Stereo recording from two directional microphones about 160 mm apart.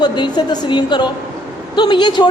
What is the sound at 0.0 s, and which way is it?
A woman's voice, 25° left (ahead or behind).